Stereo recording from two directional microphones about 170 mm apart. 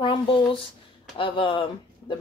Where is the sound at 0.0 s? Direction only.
30° left (ahead or behind).